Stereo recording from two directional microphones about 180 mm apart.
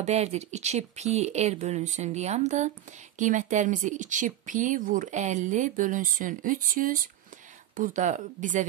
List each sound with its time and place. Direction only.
0.0 s speech: 40° right (ahead or behind)